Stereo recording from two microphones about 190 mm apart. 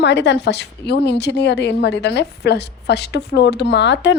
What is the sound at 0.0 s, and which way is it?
A woman's voice, 65° left (ahead or behind).